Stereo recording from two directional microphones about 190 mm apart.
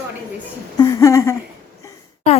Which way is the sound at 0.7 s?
20° left (ahead or behind).